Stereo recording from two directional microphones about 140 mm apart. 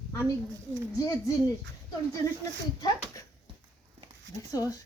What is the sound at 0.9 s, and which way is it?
Speech, 25° left (ahead or behind).